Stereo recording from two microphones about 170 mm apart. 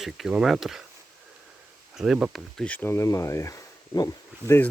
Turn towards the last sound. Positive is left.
turn(degrees=15)  # may be behind; listen again after turning